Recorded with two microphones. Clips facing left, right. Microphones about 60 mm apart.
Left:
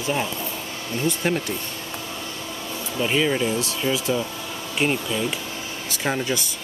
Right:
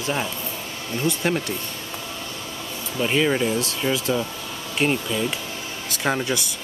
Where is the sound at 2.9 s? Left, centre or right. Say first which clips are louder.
Right 1 dB; centre.